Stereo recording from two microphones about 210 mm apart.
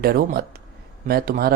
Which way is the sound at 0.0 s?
45° right (ahead or behind).